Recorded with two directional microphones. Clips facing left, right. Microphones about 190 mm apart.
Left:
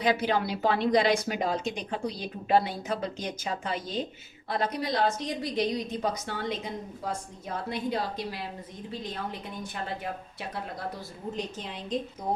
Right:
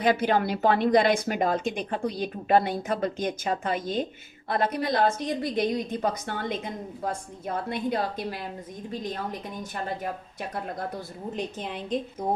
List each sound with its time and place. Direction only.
0.0 s a woman's voice: 55° right (ahead or behind)
11.3 s a woman's voice: 55° right (ahead or behind)